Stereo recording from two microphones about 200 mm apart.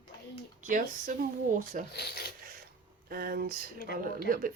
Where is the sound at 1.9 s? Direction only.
55° left (ahead or behind).